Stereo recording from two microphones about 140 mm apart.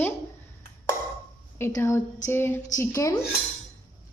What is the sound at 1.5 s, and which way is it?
A woman's voice, 15° left (ahead or behind).